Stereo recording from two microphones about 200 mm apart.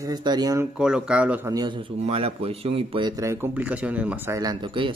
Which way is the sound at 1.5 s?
25° right (ahead or behind).